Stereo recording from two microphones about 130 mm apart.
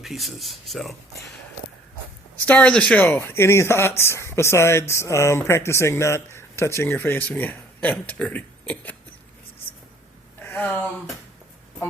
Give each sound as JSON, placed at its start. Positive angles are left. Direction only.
{"t": 0.0, "sound": "speech", "side_deg": 0}
{"t": 2.5, "sound": "speech", "side_deg": 10}
{"t": 10.5, "sound": "speech", "side_deg": 15}